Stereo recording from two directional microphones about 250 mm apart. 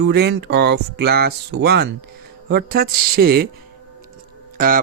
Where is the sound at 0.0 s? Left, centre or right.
Right.